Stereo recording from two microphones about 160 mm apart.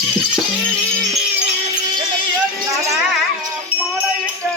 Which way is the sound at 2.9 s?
5° right (ahead or behind).